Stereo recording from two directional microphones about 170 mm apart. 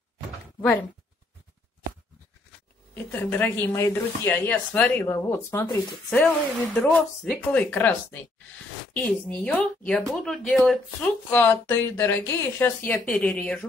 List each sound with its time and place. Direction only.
2.9 s speech: 10° left (ahead or behind)